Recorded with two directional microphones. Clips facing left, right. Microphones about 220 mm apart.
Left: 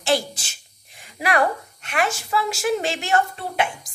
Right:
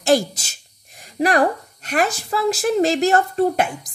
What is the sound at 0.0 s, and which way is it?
A woman's voice, 45° right (ahead or behind).